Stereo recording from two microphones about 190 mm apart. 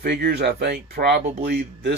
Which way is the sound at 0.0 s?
55° right (ahead or behind).